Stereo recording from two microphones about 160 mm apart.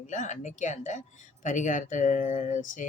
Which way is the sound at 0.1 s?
50° left (ahead or behind).